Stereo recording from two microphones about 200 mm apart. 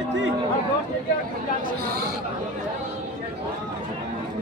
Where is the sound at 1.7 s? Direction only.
50° right (ahead or behind).